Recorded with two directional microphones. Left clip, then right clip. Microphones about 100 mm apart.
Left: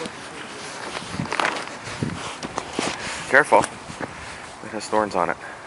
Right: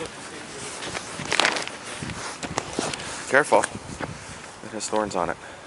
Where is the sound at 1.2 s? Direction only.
35° right (ahead or behind).